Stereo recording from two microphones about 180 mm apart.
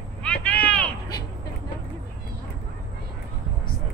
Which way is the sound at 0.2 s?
5° left (ahead or behind).